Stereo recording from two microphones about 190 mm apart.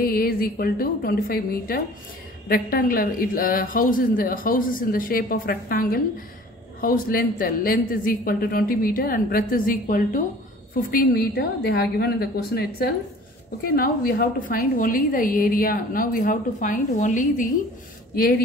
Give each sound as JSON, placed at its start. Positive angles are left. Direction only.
{"t": 0.0, "sound": "a woman's voice", "side_deg": 50}